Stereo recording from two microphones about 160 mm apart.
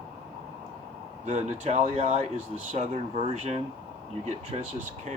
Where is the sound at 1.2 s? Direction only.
45° right (ahead or behind).